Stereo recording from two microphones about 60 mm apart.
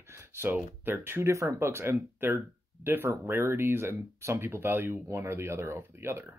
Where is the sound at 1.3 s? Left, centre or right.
Right.